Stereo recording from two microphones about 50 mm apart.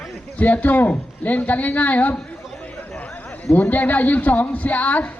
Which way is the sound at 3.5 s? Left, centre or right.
Left.